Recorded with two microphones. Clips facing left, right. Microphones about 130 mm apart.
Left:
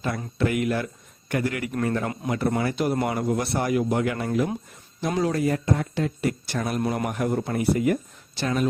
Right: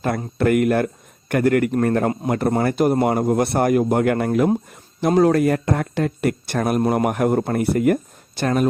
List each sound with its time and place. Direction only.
0.3 s a man's voice: 55° right (ahead or behind)